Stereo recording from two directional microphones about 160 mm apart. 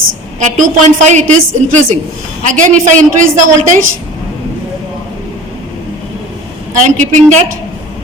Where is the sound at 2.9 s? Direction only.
50° right (ahead or behind).